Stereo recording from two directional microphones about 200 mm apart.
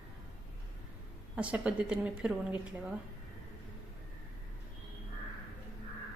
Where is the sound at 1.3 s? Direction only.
5° right (ahead or behind).